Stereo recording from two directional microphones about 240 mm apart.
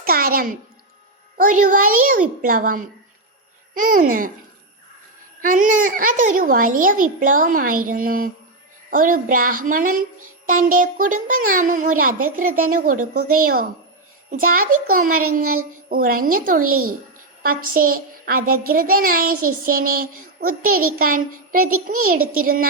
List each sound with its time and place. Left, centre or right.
0.0 s music: right
1.4 s a child's voice: right
5.4 s a child's voice: right